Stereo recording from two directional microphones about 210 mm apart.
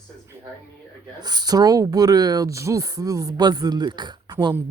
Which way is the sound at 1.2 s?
20° right (ahead or behind).